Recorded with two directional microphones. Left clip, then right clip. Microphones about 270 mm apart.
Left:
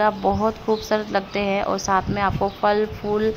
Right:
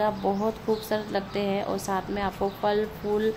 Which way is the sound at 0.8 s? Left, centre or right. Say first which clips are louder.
Left 6 dB; centre.